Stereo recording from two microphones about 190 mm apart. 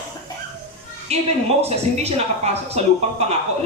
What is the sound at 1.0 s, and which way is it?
A woman's voice, 35° right (ahead or behind).